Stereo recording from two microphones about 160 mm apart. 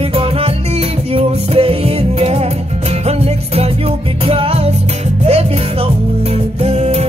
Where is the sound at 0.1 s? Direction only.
35° right (ahead or behind).